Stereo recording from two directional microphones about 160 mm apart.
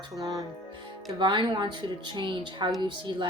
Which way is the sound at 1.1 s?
30° right (ahead or behind).